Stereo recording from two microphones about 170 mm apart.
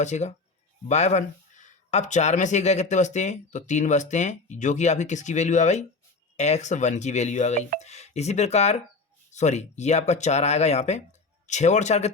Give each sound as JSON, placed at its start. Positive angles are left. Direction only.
{"t": 0.0, "sound": "speech", "side_deg": 45}